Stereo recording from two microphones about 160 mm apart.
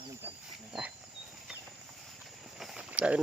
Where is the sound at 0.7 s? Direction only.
5° right (ahead or behind).